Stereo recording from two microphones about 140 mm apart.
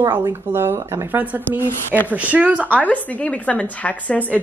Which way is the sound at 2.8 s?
10° left (ahead or behind).